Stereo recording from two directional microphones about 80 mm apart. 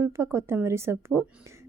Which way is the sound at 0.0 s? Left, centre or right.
Right.